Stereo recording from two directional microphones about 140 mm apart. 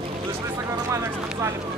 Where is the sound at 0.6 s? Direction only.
20° right (ahead or behind).